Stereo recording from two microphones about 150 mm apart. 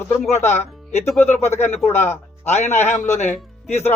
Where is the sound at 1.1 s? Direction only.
15° left (ahead or behind).